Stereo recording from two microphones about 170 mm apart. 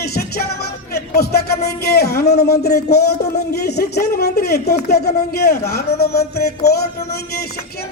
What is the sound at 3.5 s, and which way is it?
Speech, 70° left (ahead or behind).